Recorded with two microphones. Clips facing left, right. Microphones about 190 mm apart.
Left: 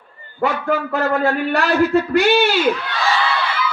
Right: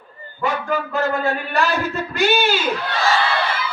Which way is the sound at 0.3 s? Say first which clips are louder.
Left 3 dB; 65° left (ahead or behind).